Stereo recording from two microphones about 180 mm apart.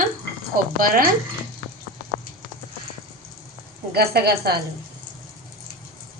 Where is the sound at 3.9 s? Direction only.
60° right (ahead or behind).